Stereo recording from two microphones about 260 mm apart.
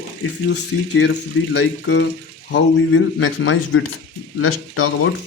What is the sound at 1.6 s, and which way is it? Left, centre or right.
Speech, left.